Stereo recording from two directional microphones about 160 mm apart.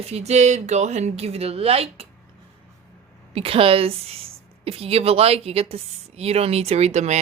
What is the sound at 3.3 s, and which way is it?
A woman's voice, 35° right (ahead or behind).